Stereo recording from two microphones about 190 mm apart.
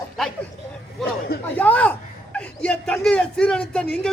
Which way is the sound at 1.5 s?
10° left (ahead or behind).